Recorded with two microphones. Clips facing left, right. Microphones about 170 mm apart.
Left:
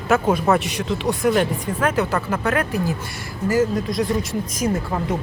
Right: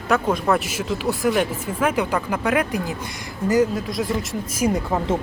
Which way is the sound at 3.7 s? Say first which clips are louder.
Left 3 dB; centre (ahead or behind).